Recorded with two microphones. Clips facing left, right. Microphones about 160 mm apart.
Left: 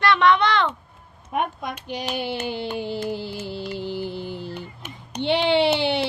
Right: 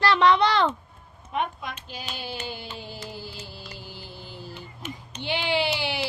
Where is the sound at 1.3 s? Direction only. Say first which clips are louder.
Left 3 dB; 50° left (ahead or behind).